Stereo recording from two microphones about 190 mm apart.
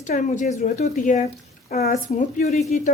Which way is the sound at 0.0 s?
40° left (ahead or behind).